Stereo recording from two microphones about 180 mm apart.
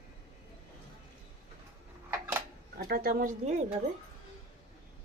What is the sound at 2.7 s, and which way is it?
Speech, 55° right (ahead or behind).